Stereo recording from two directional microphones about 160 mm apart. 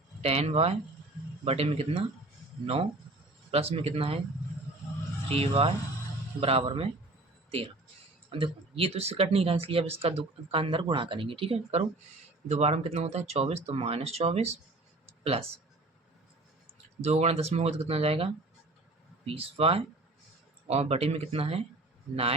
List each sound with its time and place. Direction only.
0.2 s speech: 40° right (ahead or behind)
3.5 s speech: 40° right (ahead or behind)
5.3 s speech: 35° right (ahead or behind)
8.3 s speech: 35° right (ahead or behind)
17.0 s speech: 40° right (ahead or behind)